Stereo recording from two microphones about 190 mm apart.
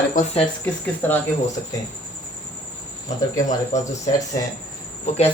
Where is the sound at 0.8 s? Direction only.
10° left (ahead or behind).